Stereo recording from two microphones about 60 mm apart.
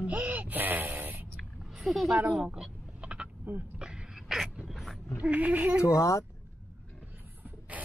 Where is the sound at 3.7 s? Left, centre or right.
Centre.